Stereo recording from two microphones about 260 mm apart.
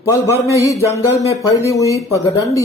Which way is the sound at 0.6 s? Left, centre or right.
Centre.